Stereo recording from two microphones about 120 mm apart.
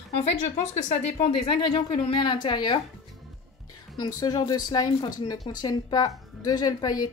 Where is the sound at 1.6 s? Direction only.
35° left (ahead or behind).